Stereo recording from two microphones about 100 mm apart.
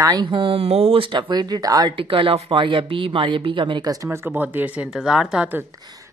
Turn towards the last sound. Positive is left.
turn(degrees=-10)  # may be behind; listen again after turning